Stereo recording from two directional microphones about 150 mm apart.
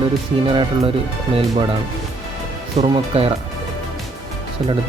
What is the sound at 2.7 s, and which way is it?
Speech, 40° right (ahead or behind).